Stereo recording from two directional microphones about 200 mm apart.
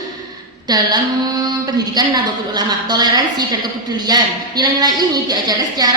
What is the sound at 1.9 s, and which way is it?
A woman's voice, 20° right (ahead or behind).